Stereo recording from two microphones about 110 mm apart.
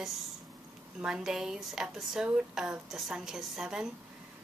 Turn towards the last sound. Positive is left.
turn(degrees=-5)  # may be behind; listen again after turning